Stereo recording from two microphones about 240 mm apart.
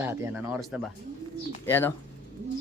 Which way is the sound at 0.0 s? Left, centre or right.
Centre.